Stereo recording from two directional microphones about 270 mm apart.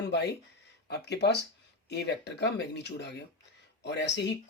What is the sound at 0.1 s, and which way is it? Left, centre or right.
Speech, left.